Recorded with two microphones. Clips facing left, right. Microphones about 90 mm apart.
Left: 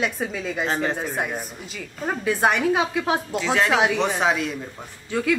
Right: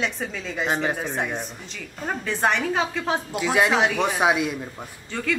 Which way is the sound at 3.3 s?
10° right (ahead or behind).